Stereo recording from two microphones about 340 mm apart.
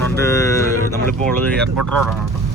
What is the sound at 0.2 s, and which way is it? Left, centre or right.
Speech, centre.